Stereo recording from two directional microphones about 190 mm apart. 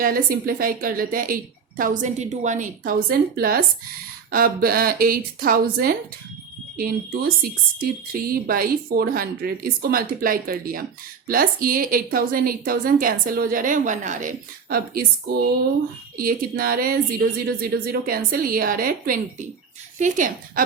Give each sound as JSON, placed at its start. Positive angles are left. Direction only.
{"t": 0.0, "sound": "speech", "side_deg": -50}
{"t": 16.1, "sound": "speech", "side_deg": -50}